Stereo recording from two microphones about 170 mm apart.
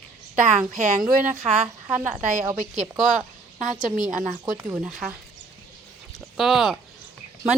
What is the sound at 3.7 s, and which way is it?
Speech, 50° right (ahead or behind).